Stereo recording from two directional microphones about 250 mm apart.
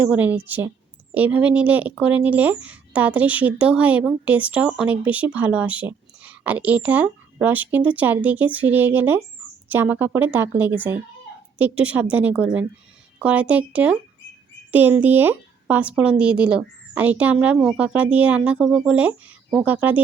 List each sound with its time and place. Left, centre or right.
0.0 s a woman's voice: centre